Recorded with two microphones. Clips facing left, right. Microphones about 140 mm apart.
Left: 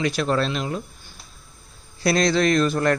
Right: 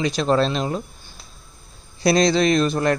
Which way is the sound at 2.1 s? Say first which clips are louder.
Right 2 dB; 15° right (ahead or behind).